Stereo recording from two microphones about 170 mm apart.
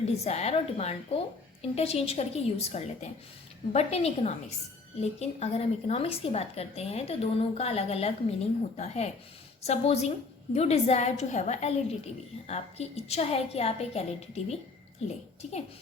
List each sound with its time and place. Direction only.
0.3 s a woman's voice: 40° left (ahead or behind)